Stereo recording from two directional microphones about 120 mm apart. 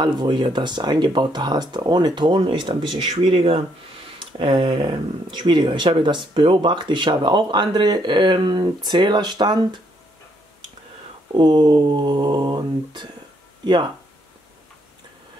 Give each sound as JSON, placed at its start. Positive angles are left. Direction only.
{"t": 0.0, "sound": "speech", "side_deg": -40}
{"t": 11.3, "sound": "speech", "side_deg": -35}